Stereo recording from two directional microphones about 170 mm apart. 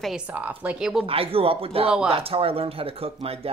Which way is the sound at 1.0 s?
35° right (ahead or behind).